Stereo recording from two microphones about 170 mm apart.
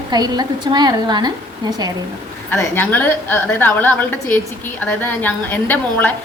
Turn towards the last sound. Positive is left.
turn(degrees=10)  # may be behind; listen again after turning